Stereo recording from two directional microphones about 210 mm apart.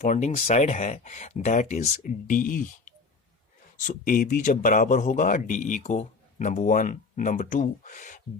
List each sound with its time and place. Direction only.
0.0 s a man's voice: 35° left (ahead or behind)